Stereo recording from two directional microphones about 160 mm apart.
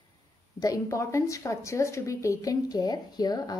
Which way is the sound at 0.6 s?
20° left (ahead or behind).